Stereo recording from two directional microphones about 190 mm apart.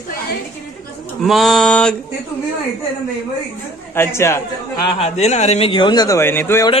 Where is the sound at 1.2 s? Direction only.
Centre (ahead or behind).